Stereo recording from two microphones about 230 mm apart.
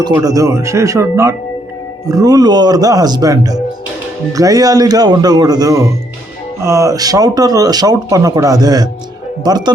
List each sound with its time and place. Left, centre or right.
0.0 s speech: centre